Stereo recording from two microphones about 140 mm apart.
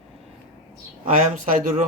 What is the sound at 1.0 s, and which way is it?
Speech, 65° right (ahead or behind).